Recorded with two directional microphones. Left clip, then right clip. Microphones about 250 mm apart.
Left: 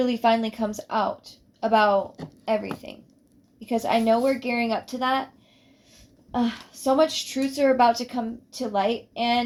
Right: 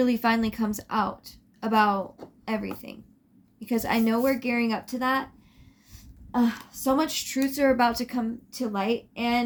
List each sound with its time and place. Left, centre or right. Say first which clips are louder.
0.0 s speech: left 3 dB; right
6.3 s speech: even; right